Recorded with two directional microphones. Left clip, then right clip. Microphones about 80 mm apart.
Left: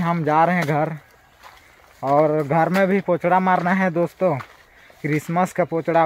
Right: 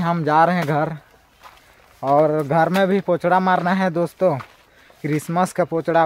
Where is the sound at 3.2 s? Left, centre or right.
Right.